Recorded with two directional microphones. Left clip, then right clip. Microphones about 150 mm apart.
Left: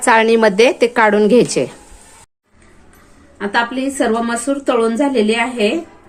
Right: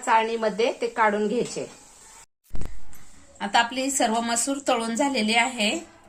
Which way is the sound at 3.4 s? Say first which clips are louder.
Left 5 dB; 70° right (ahead or behind).